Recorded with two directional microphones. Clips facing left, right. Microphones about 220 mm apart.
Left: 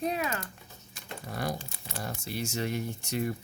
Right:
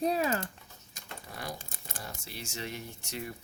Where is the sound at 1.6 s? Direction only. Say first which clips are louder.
Left 6 dB; 50° right (ahead or behind).